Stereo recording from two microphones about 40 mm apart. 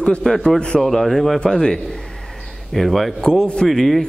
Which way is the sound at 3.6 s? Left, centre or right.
Centre.